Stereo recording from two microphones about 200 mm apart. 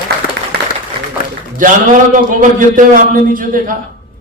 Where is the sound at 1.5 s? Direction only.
40° right (ahead or behind).